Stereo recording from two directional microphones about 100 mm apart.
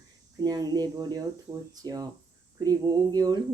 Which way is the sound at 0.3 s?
40° right (ahead or behind).